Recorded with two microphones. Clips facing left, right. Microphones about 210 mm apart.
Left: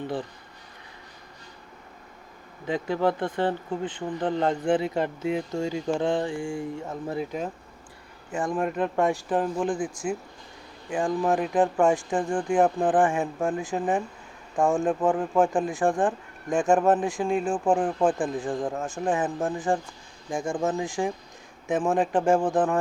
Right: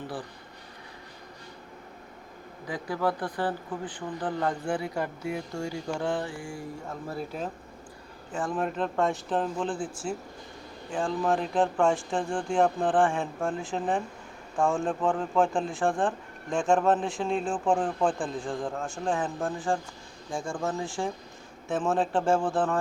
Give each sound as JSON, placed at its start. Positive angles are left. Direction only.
{"t": 2.6, "sound": "speech", "side_deg": 25}